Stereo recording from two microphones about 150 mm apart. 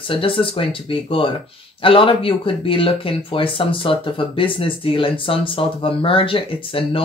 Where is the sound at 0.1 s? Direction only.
35° left (ahead or behind).